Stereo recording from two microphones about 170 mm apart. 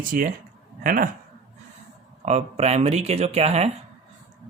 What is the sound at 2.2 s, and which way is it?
Speech, 40° right (ahead or behind).